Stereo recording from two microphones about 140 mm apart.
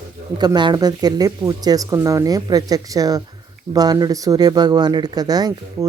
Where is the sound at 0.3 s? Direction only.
30° right (ahead or behind).